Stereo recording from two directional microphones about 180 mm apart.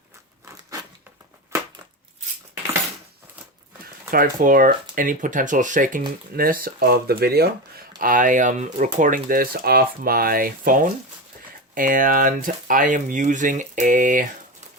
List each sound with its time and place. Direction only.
1.5 s a sound: 15° right (ahead or behind)
4.1 s speech: 50° right (ahead or behind)
7.9 s speech: 50° right (ahead or behind)